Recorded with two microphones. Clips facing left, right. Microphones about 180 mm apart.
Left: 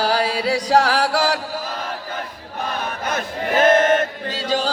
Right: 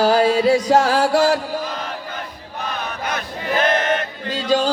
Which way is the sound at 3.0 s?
45° left (ahead or behind).